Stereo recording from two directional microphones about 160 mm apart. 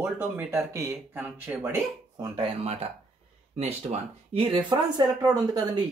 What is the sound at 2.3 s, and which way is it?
Speech, 40° right (ahead or behind).